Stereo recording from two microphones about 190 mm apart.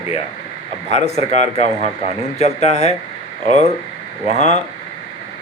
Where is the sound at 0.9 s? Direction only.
35° left (ahead or behind).